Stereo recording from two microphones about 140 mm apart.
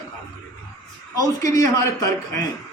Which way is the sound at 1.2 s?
25° left (ahead or behind).